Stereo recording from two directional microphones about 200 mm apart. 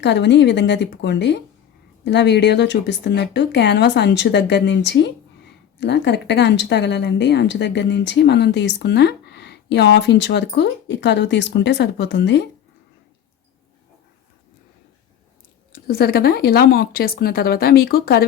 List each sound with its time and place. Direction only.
0.0 s speech: 60° left (ahead or behind)
15.7 s speech: 50° left (ahead or behind)